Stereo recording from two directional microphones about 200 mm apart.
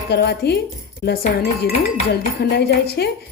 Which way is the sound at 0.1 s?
55° left (ahead or behind).